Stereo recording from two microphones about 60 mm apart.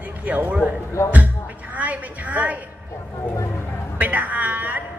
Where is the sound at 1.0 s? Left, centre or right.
Left.